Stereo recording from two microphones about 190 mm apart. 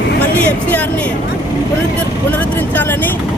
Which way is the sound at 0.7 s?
5° left (ahead or behind).